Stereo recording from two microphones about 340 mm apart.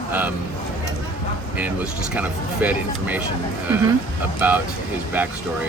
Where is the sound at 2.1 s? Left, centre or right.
Centre.